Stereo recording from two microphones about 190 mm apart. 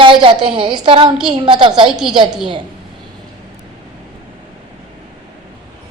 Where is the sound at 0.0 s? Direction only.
25° right (ahead or behind).